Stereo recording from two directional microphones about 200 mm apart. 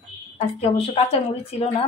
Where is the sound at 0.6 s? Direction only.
30° left (ahead or behind).